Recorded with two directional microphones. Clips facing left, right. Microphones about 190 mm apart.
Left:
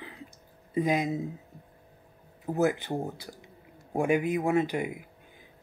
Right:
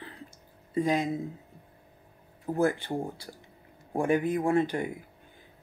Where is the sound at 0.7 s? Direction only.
15° left (ahead or behind).